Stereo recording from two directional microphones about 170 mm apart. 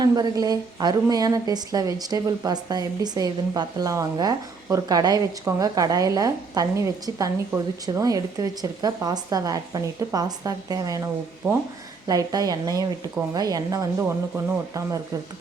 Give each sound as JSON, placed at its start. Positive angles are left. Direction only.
{"t": 0.0, "sound": "a woman's voice", "side_deg": -20}